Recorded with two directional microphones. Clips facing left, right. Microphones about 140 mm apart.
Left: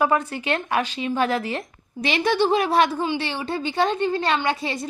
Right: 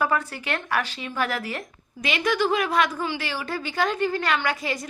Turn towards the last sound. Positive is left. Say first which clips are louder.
# left 2 dB
turn(degrees=25)  # may be behind; listen again after turning